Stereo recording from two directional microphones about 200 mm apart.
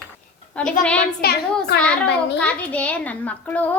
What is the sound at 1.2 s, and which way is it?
Speech, 50° left (ahead or behind).